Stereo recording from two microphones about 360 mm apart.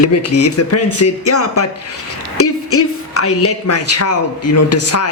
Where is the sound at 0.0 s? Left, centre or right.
Left.